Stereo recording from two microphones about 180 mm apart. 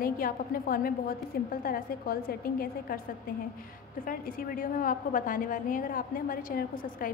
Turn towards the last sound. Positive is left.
turn(degrees=50)  # may be behind; listen again after turning